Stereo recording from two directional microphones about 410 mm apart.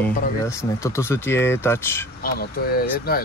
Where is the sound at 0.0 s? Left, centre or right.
Centre.